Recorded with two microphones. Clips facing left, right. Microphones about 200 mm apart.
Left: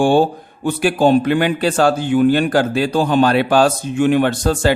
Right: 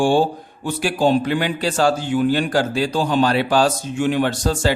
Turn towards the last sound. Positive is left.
turn(degrees=55)  # may be behind; listen again after turning